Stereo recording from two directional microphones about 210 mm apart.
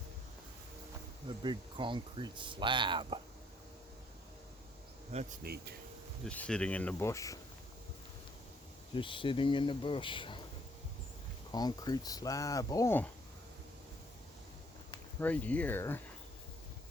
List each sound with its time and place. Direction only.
1.4 s speech: 20° right (ahead or behind)
5.1 s insect: 40° right (ahead or behind)
6.2 s speech: 5° left (ahead or behind)
9.0 s speech: 25° left (ahead or behind)
11.5 s speech: 20° left (ahead or behind)
15.2 s speech: 5° left (ahead or behind)